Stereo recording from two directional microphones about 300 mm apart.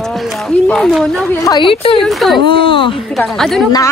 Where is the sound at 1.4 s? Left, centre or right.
Centre.